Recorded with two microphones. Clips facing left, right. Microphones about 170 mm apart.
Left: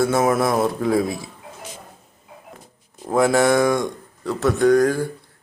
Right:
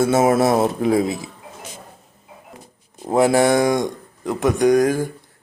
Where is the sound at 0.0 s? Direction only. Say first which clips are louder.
Right 3 dB; 20° right (ahead or behind).